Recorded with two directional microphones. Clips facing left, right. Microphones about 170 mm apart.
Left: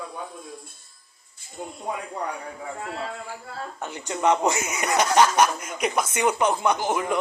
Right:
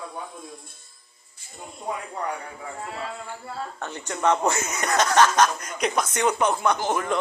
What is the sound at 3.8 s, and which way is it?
Speech, 10° left (ahead or behind).